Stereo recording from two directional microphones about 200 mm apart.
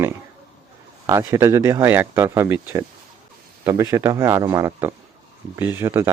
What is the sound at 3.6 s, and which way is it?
Speech, 15° right (ahead or behind).